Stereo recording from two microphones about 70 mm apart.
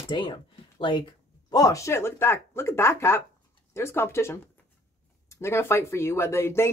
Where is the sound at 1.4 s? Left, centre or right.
Left.